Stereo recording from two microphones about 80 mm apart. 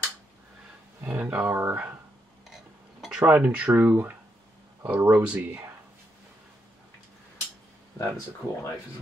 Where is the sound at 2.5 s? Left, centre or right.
Centre; by 4.1 s right.